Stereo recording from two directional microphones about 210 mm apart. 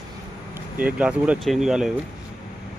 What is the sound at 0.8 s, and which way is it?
Speech, 5° right (ahead or behind).